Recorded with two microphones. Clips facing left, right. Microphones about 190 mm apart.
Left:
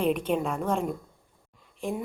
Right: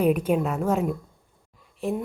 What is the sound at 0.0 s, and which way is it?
A woman's voice, 10° right (ahead or behind).